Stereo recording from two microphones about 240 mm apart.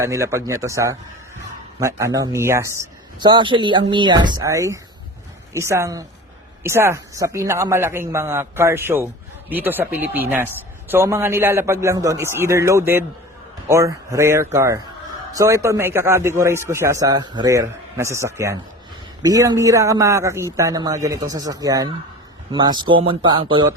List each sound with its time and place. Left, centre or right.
0.0 s a man's voice: centre